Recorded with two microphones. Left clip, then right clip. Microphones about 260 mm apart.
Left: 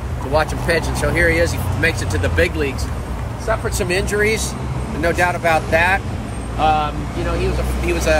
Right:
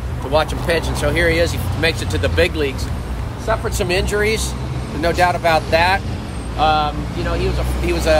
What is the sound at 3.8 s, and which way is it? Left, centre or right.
Speech, right.